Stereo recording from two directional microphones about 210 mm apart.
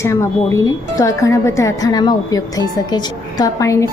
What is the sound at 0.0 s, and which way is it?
Speech, 15° left (ahead or behind).